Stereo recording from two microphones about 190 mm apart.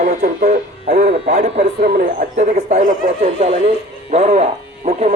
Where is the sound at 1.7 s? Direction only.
50° right (ahead or behind).